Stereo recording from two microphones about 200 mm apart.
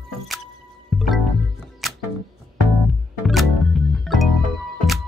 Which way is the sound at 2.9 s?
Centre (ahead or behind).